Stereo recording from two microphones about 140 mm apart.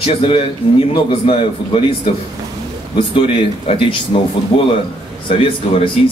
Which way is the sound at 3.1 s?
40° left (ahead or behind).